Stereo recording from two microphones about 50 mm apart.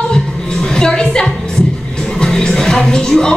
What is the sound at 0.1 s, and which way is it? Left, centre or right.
Music, centre.